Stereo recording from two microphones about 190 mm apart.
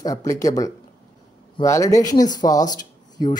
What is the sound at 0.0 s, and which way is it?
Speech, 15° left (ahead or behind).